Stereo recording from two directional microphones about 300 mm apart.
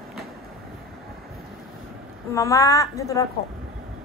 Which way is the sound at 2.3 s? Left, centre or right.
Centre.